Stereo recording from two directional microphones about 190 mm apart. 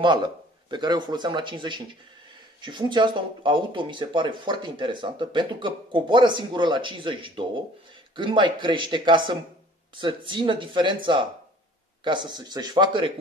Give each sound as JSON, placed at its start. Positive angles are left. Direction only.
{"t": 0.0, "sound": "speech", "side_deg": -25}